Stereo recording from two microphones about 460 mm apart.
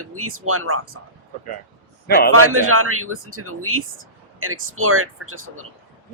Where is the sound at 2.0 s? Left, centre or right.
Centre.